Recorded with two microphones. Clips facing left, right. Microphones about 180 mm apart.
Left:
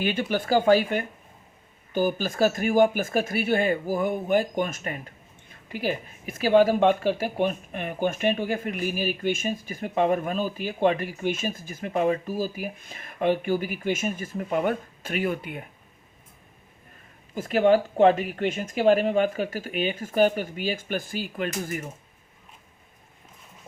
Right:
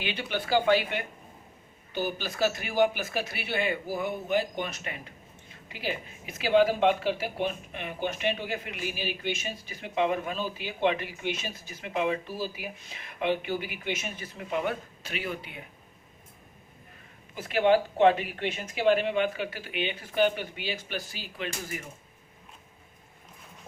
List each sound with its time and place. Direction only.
0.0 s speech: 45° left (ahead or behind)
17.3 s speech: 45° left (ahead or behind)